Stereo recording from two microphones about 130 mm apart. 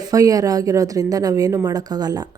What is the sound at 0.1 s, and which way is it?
A woman's voice, 30° right (ahead or behind).